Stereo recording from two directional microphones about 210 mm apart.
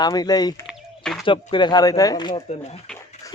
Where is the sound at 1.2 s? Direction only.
20° left (ahead or behind).